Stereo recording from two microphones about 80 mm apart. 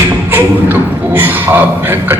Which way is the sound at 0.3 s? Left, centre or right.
Right.